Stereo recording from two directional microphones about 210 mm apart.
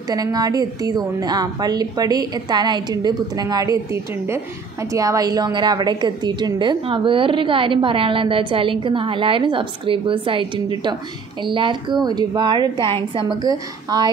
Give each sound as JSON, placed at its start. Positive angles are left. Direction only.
{"t": 0.1, "sound": "a woman's voice", "side_deg": -15}